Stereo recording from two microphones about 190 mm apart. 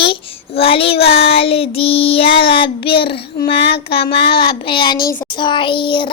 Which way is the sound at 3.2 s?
55° left (ahead or behind).